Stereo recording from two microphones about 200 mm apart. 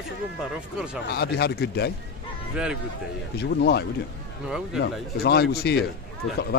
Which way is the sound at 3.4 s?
55° left (ahead or behind).